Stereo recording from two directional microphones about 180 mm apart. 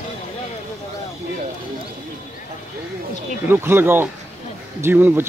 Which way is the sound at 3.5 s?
10° right (ahead or behind).